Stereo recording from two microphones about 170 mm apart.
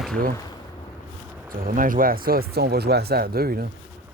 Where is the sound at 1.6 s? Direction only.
55° right (ahead or behind).